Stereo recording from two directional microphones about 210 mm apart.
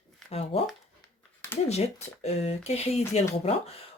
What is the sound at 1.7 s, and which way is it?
Speech, 30° left (ahead or behind).